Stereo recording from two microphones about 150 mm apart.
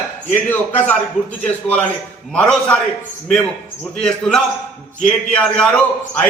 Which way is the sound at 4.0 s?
5° left (ahead or behind).